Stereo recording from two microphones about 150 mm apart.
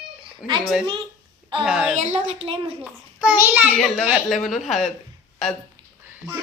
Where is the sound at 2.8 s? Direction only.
5° right (ahead or behind).